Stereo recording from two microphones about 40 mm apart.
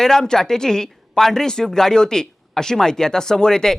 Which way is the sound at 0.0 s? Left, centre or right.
Centre.